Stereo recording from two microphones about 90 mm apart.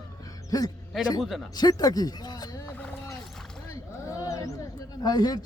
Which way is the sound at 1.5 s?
45° left (ahead or behind).